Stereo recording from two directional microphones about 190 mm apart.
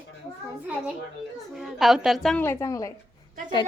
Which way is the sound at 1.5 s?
Centre (ahead or behind).